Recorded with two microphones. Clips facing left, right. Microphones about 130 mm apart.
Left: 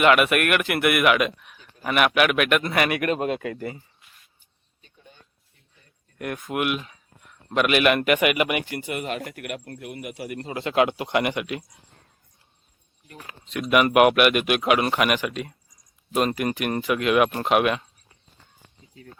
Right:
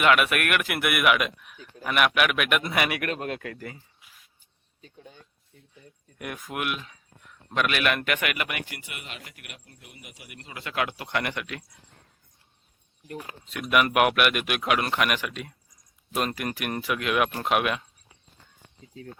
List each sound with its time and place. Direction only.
0.0 s a man's voice: centre (ahead or behind)
6.1 s a man's voice: 5° right (ahead or behind); by 8.6 s 15° left (ahead or behind)
8.7 s speech: 40° left (ahead or behind); by 11.6 s 15° left (ahead or behind)
13.5 s a man's voice: centre (ahead or behind)
17.4 s a sound: centre (ahead or behind)